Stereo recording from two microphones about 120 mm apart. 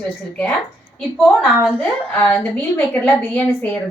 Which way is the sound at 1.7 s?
10° left (ahead or behind).